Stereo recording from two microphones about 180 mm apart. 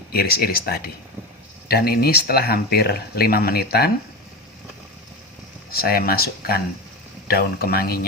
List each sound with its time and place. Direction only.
0.1 s speech: 60° left (ahead or behind)
5.7 s speech: 55° left (ahead or behind)